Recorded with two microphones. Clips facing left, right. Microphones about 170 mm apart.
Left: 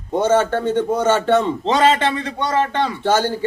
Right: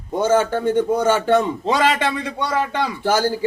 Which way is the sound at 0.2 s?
10° right (ahead or behind).